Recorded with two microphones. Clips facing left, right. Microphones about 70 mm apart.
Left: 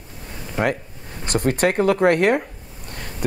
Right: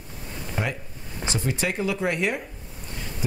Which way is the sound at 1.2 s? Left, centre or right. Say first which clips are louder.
Left 8 dB; left.